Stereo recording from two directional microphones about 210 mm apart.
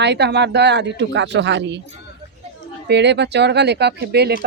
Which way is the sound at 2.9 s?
55° right (ahead or behind).